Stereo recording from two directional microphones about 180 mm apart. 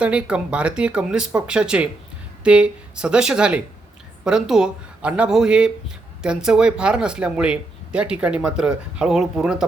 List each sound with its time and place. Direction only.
0.0 s speech: 5° right (ahead or behind)